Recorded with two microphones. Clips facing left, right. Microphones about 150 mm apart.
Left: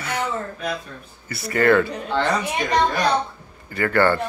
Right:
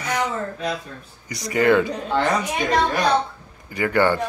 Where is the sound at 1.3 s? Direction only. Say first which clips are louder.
Even; 15° right (ahead or behind).